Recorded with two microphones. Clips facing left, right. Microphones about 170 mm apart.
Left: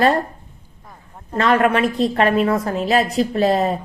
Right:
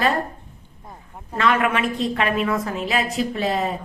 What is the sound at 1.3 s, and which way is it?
A woman's voice, 40° left (ahead or behind).